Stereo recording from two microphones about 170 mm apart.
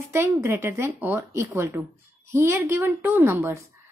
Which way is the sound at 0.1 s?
15° right (ahead or behind).